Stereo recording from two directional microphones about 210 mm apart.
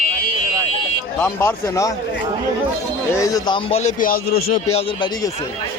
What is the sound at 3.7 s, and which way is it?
Speech, 30° left (ahead or behind).